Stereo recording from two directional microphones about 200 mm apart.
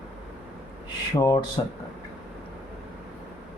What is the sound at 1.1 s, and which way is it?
Speech, 15° left (ahead or behind).